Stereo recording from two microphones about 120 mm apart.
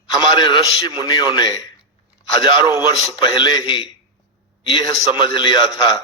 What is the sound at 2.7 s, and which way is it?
A man's voice, 40° left (ahead or behind).